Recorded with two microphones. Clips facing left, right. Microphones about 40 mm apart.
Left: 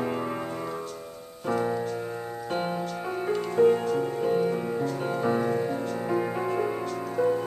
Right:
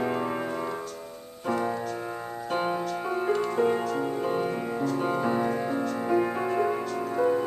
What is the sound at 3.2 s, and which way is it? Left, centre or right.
Music, centre.